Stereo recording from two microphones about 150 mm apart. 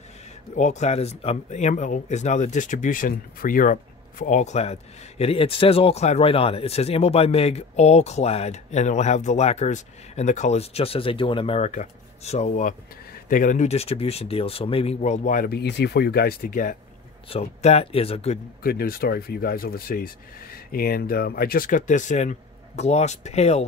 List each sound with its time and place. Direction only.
0.6 s speech: 50° left (ahead or behind)
11.7 s speech: 50° left (ahead or behind)
15.0 s speech: 55° left (ahead or behind)
17.3 s speech: 45° left (ahead or behind)
18.6 s speech: 85° left; by 23.6 s 45° left (ahead or behind)